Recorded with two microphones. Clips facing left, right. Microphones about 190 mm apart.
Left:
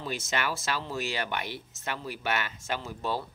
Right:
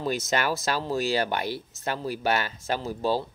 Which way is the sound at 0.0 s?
40° right (ahead or behind).